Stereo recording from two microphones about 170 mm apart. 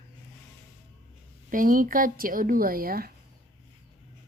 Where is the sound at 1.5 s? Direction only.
50° right (ahead or behind).